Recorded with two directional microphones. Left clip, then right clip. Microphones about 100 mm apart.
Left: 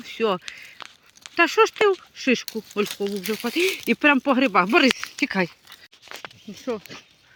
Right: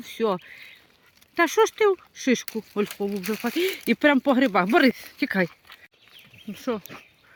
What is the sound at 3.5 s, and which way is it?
Speech, 35° right (ahead or behind).